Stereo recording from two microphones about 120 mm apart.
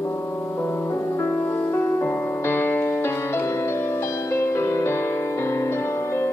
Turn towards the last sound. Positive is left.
turn(degrees=25)  # may be behind; listen again after turning